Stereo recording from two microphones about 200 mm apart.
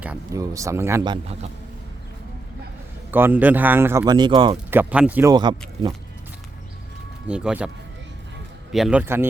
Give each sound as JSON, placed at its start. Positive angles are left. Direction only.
{"t": 0.0, "sound": "speech", "side_deg": -10}
{"t": 1.1, "sound": "a man's voice", "side_deg": -30}
{"t": 3.1, "sound": "speech", "side_deg": -10}
{"t": 4.7, "sound": "speech", "side_deg": -10}
{"t": 5.3, "sound": "speech", "side_deg": -20}
{"t": 7.3, "sound": "speech", "side_deg": -5}
{"t": 8.7, "sound": "speech", "side_deg": -5}